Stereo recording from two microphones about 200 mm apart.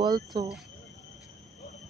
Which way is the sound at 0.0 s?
20° right (ahead or behind).